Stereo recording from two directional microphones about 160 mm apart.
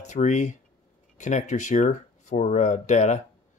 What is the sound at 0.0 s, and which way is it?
Speech, 45° left (ahead or behind).